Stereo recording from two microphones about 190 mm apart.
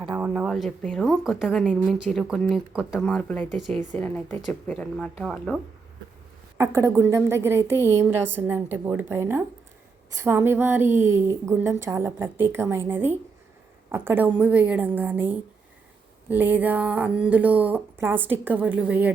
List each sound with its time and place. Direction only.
0.1 s speech: 5° right (ahead or behind)
6.6 s a woman's voice: 15° right (ahead or behind)